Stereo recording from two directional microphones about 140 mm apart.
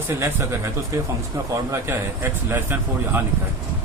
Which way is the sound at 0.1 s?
15° right (ahead or behind).